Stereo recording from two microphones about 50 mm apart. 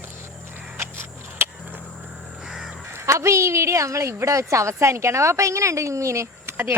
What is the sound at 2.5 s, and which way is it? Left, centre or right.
Crow, centre.